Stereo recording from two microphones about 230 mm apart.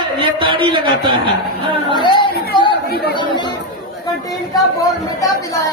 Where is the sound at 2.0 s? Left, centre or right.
Centre.